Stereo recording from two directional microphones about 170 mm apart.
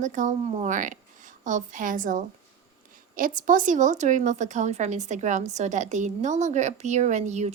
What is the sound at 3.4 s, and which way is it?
A woman's voice, 50° right (ahead or behind).